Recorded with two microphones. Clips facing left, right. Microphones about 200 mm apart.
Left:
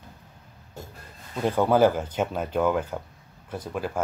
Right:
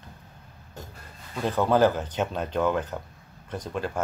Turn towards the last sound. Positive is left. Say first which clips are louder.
# even
turn(degrees=10)  # may be behind; listen again after turning